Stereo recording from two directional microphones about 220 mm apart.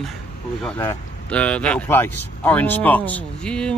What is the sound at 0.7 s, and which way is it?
Speech, 15° left (ahead or behind).